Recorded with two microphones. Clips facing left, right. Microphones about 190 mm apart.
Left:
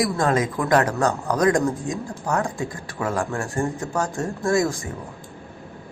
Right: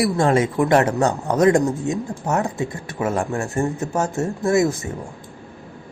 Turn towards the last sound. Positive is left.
turn(degrees=-20)  # may be behind; listen again after turning